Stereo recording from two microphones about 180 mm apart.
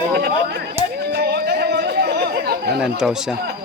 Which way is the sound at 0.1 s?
60° right (ahead or behind).